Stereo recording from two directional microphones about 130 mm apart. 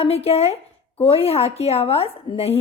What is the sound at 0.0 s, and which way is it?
Speech, 50° left (ahead or behind).